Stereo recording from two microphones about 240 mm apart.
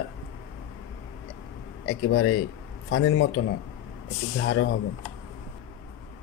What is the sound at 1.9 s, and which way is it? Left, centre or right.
A man's voice, left.